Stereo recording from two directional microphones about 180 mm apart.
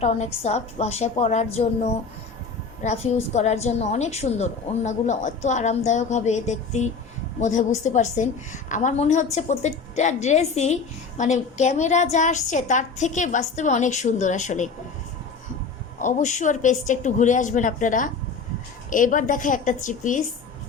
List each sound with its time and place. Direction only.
0.0 s a woman's voice: 35° left (ahead or behind)
16.0 s a woman's voice: 45° left (ahead or behind)